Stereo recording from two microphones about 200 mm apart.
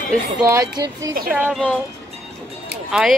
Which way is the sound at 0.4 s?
15° right (ahead or behind).